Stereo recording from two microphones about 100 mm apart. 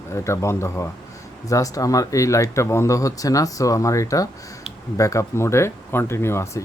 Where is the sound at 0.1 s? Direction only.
30° left (ahead or behind).